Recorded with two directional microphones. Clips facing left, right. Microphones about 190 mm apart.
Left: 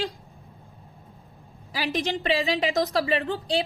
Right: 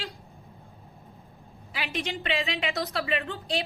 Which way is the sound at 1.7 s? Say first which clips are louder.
Left 6 dB; 40° left (ahead or behind).